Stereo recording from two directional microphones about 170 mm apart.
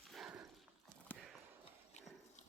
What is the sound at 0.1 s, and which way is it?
Clip-clop, 5° right (ahead or behind).